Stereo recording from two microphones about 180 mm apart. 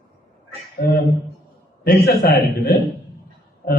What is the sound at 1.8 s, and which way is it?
A man's voice, 55° left (ahead or behind).